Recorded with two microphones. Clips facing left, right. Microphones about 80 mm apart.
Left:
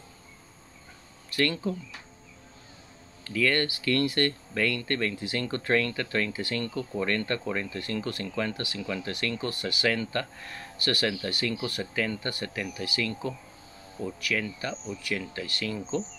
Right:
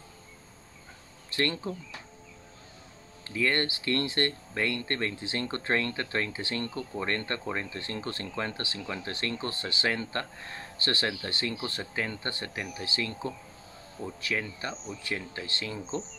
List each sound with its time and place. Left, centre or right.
1.3 s speech: right
3.3 s speech: right